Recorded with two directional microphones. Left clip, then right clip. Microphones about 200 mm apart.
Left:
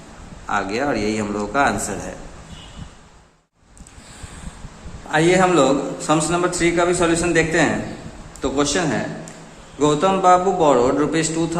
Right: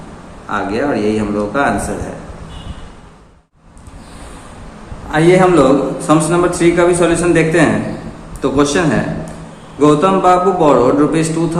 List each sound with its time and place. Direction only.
0.4 s a man's voice: 40° left (ahead or behind)
5.1 s a man's voice: 30° left (ahead or behind)